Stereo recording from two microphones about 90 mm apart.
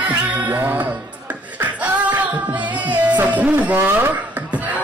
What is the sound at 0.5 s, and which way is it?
Music, 20° right (ahead or behind).